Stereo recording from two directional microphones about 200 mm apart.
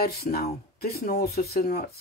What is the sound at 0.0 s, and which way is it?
Speech, 50° left (ahead or behind).